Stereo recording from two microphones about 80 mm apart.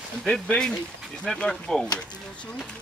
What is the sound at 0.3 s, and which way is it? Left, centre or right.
Speech, centre.